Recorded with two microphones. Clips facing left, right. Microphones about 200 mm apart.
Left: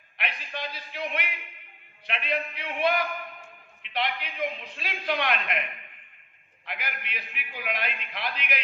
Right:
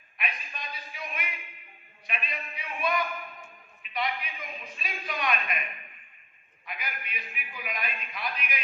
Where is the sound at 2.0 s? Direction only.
75° left (ahead or behind).